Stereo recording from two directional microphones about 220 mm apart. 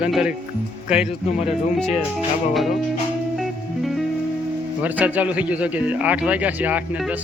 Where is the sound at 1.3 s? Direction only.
30° left (ahead or behind).